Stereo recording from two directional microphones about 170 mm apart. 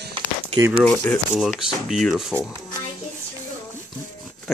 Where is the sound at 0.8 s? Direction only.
5° left (ahead or behind).